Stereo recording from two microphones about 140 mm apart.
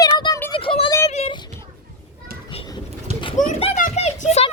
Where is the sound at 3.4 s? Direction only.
65° left (ahead or behind).